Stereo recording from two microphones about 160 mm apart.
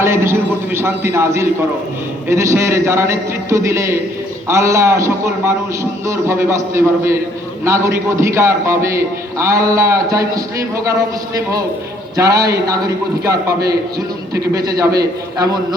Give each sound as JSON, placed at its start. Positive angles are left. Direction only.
{"t": 0.0, "sound": "a man's voice", "side_deg": -15}
{"t": 12.1, "sound": "a man's voice", "side_deg": -20}
{"t": 14.3, "sound": "a man's voice", "side_deg": -20}